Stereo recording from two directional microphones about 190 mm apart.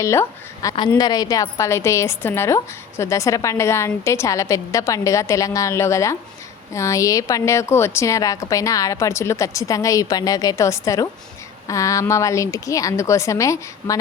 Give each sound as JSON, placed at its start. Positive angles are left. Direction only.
{"t": 0.0, "sound": "a woman's voice", "side_deg": 15}